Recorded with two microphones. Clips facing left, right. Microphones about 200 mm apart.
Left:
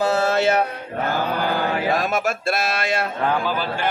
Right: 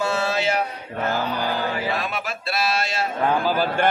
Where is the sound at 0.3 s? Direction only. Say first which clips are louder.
Left 4 dB; 55° left (ahead or behind).